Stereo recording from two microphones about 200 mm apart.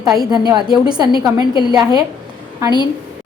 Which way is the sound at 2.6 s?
20° right (ahead or behind).